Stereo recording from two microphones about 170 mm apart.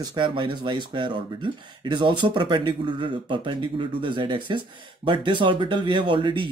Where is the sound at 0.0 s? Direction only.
25° right (ahead or behind).